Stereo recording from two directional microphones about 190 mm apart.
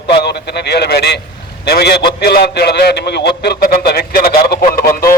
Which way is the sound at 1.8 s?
60° left (ahead or behind).